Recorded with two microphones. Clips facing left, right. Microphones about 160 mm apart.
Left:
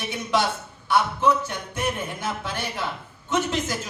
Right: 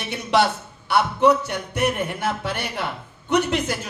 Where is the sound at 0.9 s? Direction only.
65° right (ahead or behind).